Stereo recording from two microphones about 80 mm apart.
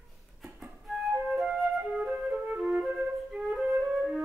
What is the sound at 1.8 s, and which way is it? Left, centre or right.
Flute, centre.